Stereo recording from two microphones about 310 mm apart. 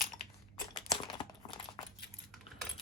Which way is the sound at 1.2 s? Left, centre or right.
Centre.